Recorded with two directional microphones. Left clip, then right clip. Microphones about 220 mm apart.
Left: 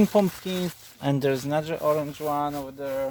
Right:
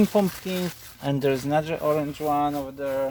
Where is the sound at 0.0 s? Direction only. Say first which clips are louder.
Left 1 dB; 30° left (ahead or behind).